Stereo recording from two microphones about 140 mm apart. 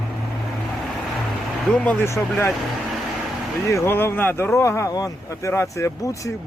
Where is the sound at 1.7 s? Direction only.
10° left (ahead or behind).